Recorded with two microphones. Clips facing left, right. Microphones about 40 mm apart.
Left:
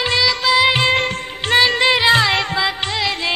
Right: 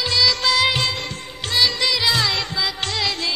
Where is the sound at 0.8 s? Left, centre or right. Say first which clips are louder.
Left 8 dB; left.